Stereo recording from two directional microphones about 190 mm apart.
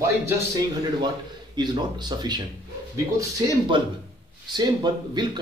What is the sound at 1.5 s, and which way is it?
Speech, 20° right (ahead or behind).